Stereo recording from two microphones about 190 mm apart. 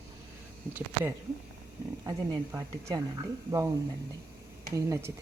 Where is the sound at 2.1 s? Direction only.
15° right (ahead or behind).